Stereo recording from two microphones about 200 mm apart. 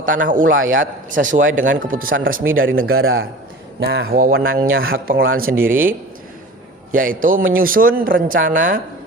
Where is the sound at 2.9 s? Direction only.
90° right.